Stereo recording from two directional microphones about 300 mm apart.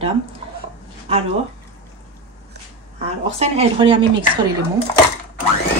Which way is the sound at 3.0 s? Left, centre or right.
Right.